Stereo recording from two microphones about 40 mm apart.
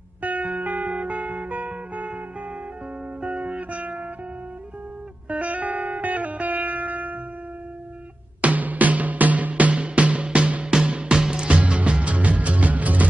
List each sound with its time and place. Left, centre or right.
0.2 s music: right
3.2 s music: right
5.3 s music: right
8.4 s music: right
10.7 s music: centre; by 13.0 s right